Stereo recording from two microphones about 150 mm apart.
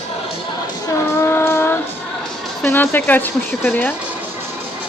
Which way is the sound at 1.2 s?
15° left (ahead or behind).